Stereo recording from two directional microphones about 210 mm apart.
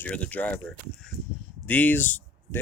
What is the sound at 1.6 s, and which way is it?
Speech, 10° left (ahead or behind).